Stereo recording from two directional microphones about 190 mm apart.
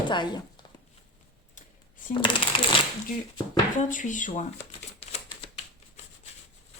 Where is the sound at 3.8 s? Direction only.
40° left (ahead or behind).